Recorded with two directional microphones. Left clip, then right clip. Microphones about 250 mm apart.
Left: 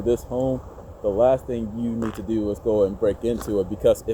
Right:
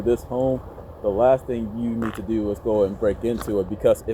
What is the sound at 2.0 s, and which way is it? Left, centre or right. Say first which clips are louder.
Speech: right 1 dB; centre.